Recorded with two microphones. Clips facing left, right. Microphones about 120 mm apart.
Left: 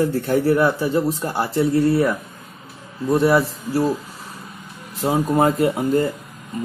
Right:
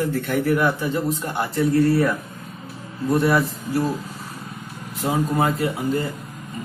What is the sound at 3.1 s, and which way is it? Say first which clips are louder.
Speech: left 3 dB; 30° left (ahead or behind).